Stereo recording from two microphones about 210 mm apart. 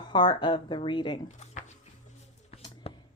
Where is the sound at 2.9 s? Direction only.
30° left (ahead or behind).